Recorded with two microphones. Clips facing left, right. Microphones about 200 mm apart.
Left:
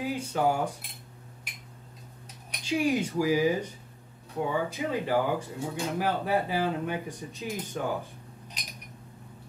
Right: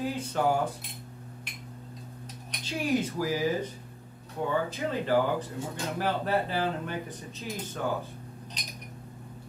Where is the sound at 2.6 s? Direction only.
10° left (ahead or behind).